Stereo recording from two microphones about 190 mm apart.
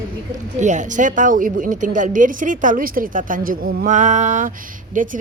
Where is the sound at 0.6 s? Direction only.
40° right (ahead or behind).